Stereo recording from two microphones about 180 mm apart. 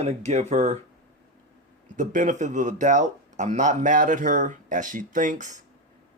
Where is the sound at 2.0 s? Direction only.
45° right (ahead or behind).